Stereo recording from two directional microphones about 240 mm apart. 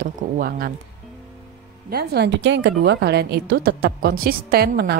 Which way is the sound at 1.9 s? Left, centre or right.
Right.